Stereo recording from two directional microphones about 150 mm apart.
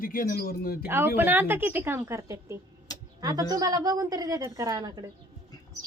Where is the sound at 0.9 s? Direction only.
15° right (ahead or behind).